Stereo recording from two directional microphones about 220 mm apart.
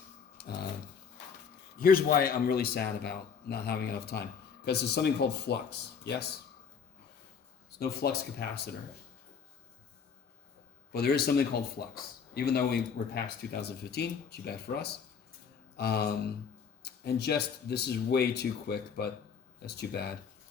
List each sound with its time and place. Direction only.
1.8 s speech: 40° left (ahead or behind)
7.8 s speech: 45° left (ahead or behind)
10.9 s speech: 45° left (ahead or behind)